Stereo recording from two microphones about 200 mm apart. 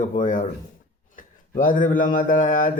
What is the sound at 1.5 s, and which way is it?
Speech, 40° left (ahead or behind).